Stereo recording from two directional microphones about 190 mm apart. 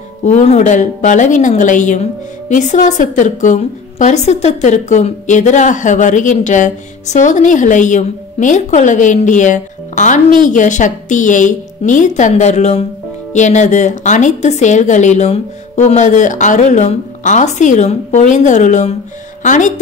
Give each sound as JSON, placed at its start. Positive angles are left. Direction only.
{"t": 0.2, "sound": "a woman's voice", "side_deg": 40}